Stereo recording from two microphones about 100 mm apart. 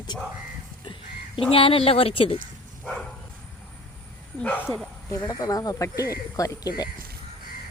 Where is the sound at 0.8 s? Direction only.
60° left (ahead or behind).